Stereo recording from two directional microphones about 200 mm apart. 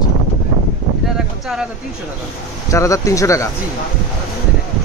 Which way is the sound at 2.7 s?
15° left (ahead or behind).